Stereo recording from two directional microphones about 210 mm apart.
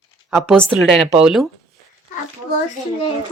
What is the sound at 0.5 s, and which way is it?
Speech, 5° left (ahead or behind).